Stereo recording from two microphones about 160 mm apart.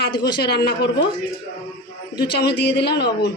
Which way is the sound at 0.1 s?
25° left (ahead or behind).